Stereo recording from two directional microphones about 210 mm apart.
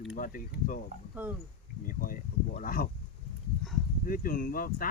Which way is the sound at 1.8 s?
40° left (ahead or behind).